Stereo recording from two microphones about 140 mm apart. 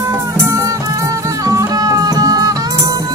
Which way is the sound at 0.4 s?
20° right (ahead or behind).